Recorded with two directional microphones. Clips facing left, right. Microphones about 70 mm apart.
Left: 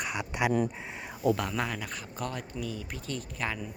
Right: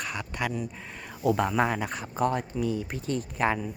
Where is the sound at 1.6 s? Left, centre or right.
Right.